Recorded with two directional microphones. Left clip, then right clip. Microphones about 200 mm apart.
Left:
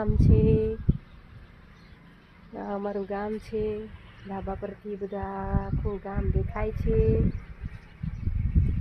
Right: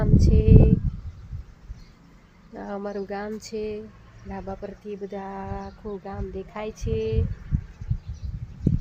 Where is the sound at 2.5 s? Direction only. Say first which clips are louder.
Even; 10° left (ahead or behind).